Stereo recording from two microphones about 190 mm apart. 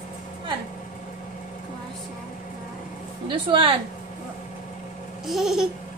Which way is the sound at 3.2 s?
25° right (ahead or behind).